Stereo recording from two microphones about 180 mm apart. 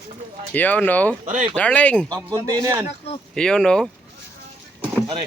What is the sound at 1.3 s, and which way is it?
Speech, 40° right (ahead or behind).